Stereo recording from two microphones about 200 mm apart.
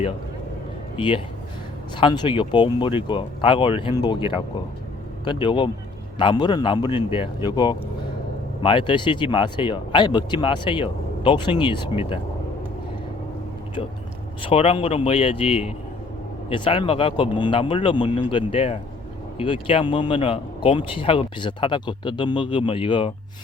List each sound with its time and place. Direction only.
0.9 s speech: 25° left (ahead or behind)
14.4 s speech: 30° left (ahead or behind)